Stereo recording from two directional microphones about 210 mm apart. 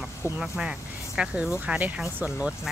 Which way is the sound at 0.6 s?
5° right (ahead or behind).